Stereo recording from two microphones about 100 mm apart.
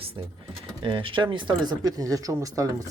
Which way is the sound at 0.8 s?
55° right (ahead or behind).